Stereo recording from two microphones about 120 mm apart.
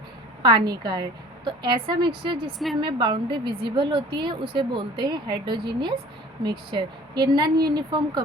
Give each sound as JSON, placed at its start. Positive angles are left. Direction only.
{"t": 0.4, "sound": "a woman's voice", "side_deg": -40}